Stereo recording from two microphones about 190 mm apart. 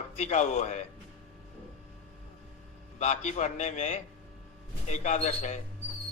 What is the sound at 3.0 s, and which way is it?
Speech, 35° left (ahead or behind).